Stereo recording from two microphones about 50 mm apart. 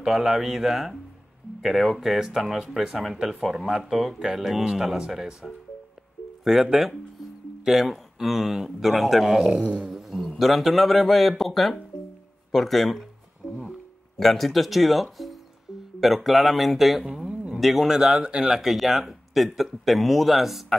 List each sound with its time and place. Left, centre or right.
0.0 s speech: centre
9.5 s a sound: right
9.8 s a sound: centre
10.4 s speech: centre
13.4 s music: centre
14.1 s speech: centre
17.1 s a sound: centre
17.6 s speech: centre
18.6 s speech: centre